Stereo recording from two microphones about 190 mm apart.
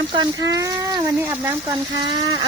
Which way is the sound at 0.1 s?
20° right (ahead or behind).